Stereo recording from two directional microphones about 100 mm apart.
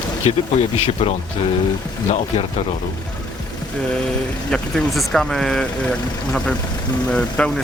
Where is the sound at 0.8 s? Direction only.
70° left (ahead or behind).